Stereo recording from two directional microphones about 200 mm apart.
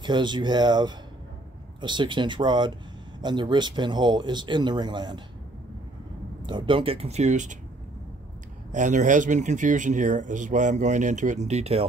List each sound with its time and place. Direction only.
0.0 s speech: 20° right (ahead or behind)
6.4 s speech: 25° right (ahead or behind)
8.7 s speech: 40° right (ahead or behind)